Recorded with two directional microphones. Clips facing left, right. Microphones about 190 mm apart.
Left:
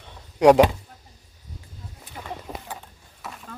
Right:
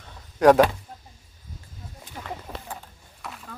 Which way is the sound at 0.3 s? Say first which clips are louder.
Left 1 dB; 15° left (ahead or behind).